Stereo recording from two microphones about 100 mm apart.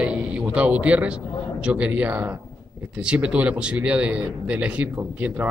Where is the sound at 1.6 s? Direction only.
15° right (ahead or behind).